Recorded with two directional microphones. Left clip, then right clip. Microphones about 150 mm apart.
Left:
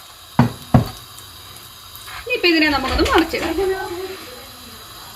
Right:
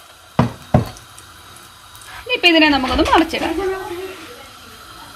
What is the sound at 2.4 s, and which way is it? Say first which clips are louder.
Speech: right 4 dB; 75° right (ahead or behind).